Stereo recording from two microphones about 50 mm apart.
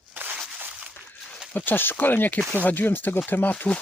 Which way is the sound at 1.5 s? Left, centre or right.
Left.